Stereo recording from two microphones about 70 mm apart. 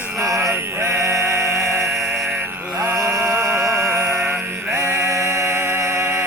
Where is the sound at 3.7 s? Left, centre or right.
Right.